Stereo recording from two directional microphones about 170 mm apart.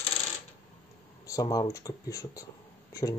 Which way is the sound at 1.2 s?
20° left (ahead or behind).